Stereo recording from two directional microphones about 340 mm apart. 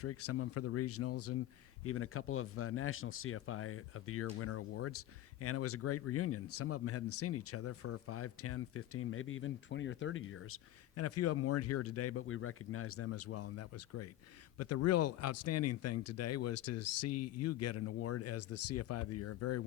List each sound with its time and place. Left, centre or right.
0.0 s speech: left